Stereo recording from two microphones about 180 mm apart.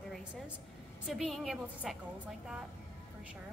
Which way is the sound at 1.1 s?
Centre (ahead or behind).